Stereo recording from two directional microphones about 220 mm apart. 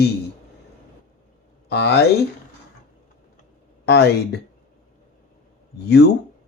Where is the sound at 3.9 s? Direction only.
50° left (ahead or behind).